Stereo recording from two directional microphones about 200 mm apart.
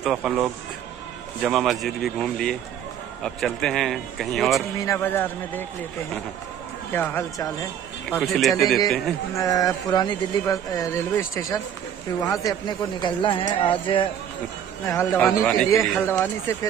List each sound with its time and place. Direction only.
0.0 s speech: 5° right (ahead or behind)
4.7 s speech: 15° left (ahead or behind)
6.9 s speech: 10° left (ahead or behind)
8.2 s speech: centre (ahead or behind)
9.4 s speech: 15° left (ahead or behind)
14.9 s speech: 15° left (ahead or behind)